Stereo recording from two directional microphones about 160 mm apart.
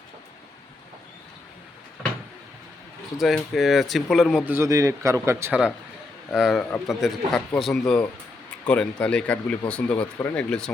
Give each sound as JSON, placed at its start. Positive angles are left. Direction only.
{"t": 3.2, "sound": "speech", "side_deg": 0}
{"t": 4.4, "sound": "a man's voice", "side_deg": -15}
{"t": 6.3, "sound": "speech", "side_deg": 0}